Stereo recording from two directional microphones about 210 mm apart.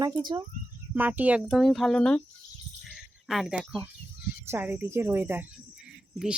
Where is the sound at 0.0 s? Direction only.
20° right (ahead or behind).